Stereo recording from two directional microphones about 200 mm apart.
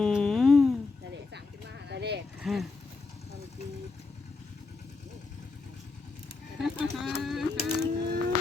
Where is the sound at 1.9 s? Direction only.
55° right (ahead or behind).